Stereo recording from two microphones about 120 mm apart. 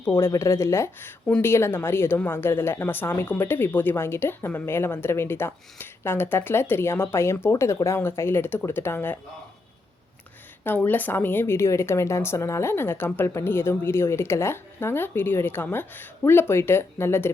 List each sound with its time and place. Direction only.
0.0 s a woman's voice: 20° left (ahead or behind)
10.6 s a woman's voice: 15° left (ahead or behind)